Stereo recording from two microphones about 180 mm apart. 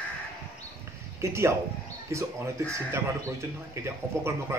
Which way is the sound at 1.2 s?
15° right (ahead or behind).